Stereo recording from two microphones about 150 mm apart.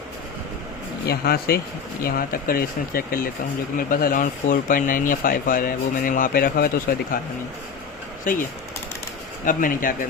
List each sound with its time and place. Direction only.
1.0 s speech: 90° left
2.0 s speech: 75° left (ahead or behind)
8.2 s speech: 60° left (ahead or behind)